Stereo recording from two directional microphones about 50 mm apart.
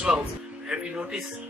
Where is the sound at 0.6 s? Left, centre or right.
Centre.